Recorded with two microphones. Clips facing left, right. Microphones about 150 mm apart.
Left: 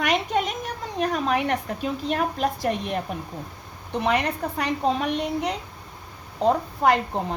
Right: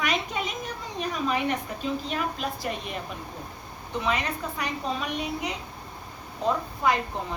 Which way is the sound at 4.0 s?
70° left (ahead or behind).